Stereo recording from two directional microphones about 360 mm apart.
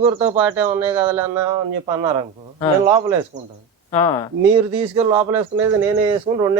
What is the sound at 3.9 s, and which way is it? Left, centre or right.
Speech, centre.